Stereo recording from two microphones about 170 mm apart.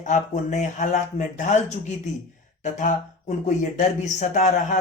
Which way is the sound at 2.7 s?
45° left (ahead or behind).